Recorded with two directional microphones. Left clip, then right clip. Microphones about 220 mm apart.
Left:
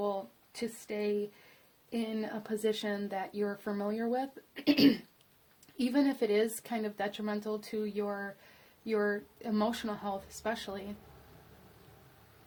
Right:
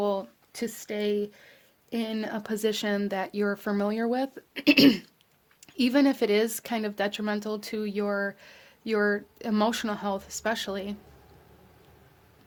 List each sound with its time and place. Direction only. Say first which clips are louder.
0.0 s speech: right 7 dB; 40° right (ahead or behind)